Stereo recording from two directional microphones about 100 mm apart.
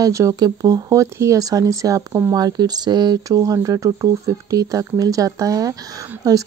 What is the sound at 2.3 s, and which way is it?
Speech, 40° right (ahead or behind).